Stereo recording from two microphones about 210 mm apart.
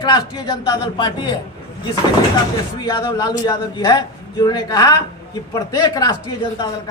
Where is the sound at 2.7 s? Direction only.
20° left (ahead or behind).